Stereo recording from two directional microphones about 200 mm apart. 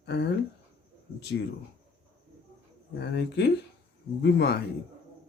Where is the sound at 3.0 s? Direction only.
55° left (ahead or behind).